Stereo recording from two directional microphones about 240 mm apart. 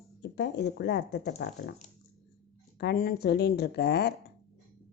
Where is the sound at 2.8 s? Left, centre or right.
Left.